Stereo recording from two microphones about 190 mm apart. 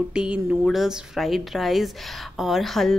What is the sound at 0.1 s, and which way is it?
A woman's voice, 5° right (ahead or behind).